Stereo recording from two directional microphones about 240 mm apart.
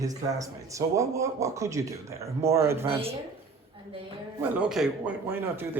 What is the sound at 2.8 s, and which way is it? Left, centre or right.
Speech, right.